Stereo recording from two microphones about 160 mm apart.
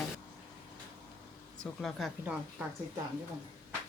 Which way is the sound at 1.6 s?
Centre (ahead or behind).